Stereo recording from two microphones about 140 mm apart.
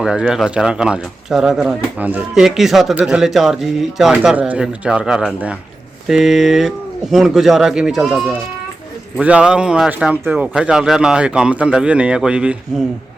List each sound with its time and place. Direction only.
0.0 s speech: 5° right (ahead or behind)
9.2 s speech: 5° right (ahead or behind)